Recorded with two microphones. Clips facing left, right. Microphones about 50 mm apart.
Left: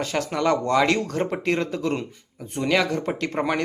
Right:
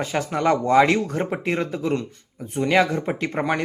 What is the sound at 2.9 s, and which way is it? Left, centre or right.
Speech, centre.